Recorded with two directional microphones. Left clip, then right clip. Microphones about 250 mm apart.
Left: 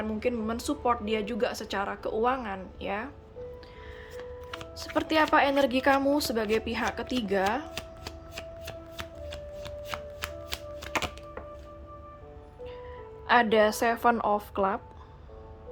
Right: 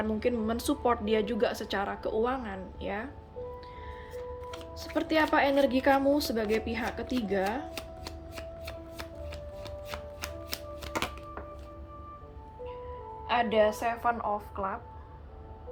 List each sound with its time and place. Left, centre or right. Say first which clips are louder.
0.0 s a woman's voice: even; centre
4.8 s a woman's voice: left 2 dB; centre
8.4 s shuffling cards: left 1 dB; centre
13.2 s speech: left 3 dB; centre